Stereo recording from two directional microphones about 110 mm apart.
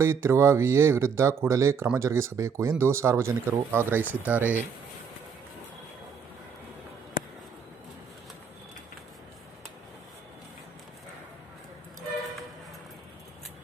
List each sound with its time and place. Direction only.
0.0 s speech: 25° right (ahead or behind)